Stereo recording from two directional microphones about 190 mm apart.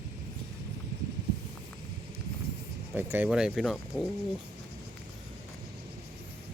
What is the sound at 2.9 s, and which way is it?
Speech, 10° right (ahead or behind).